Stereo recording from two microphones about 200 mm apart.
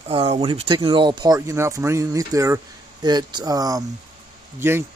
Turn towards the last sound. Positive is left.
turn(degrees=-15)  # may be behind; listen again after turning